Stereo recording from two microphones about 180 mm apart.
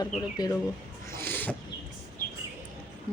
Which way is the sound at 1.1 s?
10° left (ahead or behind).